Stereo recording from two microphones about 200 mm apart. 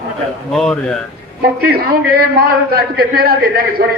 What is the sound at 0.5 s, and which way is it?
Speech, centre (ahead or behind).